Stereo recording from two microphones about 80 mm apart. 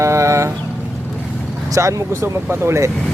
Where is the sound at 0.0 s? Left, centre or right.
Right.